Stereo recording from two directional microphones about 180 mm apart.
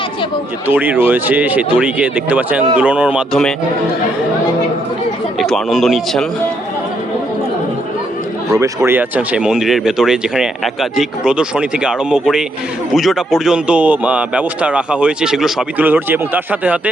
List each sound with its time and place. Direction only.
0.7 s a man's voice: 10° right (ahead or behind)
5.4 s speech: centre (ahead or behind)
8.5 s a man's voice: 15° right (ahead or behind)